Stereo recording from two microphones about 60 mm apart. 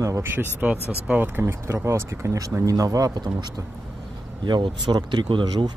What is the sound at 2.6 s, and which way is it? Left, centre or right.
Speech, right.